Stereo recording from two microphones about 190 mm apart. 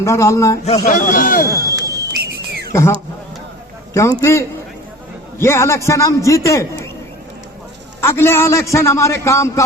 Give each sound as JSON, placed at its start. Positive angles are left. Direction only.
{"t": 0.0, "sound": "a man's voice", "side_deg": 15}
{"t": 0.6, "sound": "a man's voice", "side_deg": 40}
{"t": 1.5, "sound": "a sound", "side_deg": -20}
{"t": 2.2, "sound": "whistle", "side_deg": -55}
{"t": 4.2, "sound": "a man's voice", "side_deg": 15}
{"t": 8.0, "sound": "a man's voice", "side_deg": 15}